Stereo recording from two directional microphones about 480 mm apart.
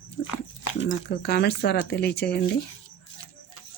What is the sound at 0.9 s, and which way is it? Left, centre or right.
Speech, centre.